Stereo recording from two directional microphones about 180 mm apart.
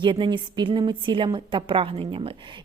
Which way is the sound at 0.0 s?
25° right (ahead or behind).